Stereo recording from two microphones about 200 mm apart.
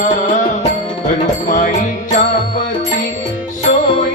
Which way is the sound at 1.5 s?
40° left (ahead or behind).